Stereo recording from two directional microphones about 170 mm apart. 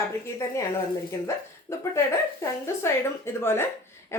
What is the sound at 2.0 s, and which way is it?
A woman's voice, 15° left (ahead or behind).